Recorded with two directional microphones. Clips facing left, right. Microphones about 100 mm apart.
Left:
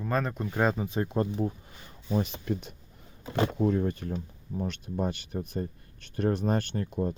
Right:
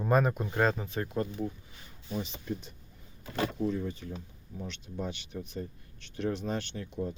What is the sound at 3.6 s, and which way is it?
Speech, 55° left (ahead or behind).